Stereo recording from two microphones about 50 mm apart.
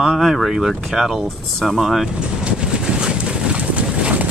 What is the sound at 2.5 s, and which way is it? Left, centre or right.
Boat, centre.